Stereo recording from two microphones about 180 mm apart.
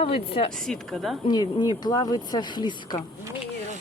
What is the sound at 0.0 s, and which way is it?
Speech, 30° left (ahead or behind).